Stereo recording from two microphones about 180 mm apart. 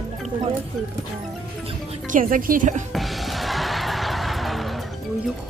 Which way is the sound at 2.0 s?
45° right (ahead or behind).